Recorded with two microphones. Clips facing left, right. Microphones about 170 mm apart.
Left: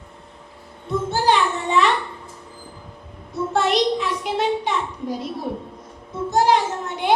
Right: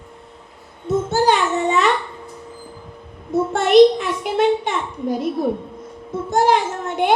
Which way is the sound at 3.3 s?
50° right (ahead or behind).